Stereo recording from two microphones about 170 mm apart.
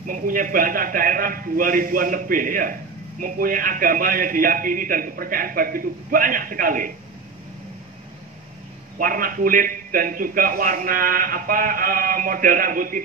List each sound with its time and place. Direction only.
0.0 s a man's voice: 55° right (ahead or behind)
8.9 s a man's voice: 55° right (ahead or behind)